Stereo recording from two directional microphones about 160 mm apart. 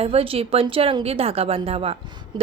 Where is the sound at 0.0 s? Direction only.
35° right (ahead or behind).